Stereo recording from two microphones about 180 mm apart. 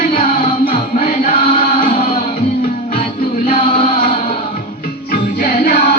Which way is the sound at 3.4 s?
35° left (ahead or behind).